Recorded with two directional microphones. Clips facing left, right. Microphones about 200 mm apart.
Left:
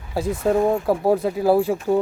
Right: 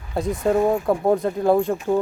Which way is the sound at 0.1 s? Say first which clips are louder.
Even; centre (ahead or behind).